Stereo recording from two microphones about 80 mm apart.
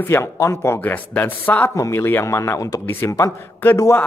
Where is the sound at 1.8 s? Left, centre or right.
Left.